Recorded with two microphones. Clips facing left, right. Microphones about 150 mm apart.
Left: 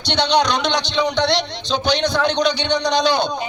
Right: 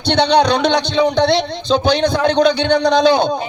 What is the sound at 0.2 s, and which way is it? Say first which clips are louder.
A man's voice: right 4 dB; 55° right (ahead or behind).